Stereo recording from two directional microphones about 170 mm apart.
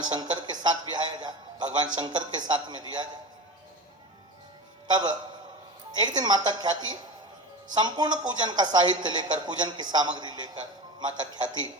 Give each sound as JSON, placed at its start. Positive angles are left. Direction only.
{"t": 0.1, "sound": "a man's voice", "side_deg": -25}
{"t": 4.9, "sound": "a man's voice", "side_deg": -25}